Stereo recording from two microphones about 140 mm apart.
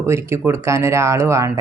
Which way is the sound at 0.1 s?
20° right (ahead or behind).